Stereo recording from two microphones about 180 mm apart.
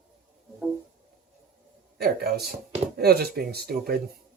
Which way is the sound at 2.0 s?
60° right (ahead or behind).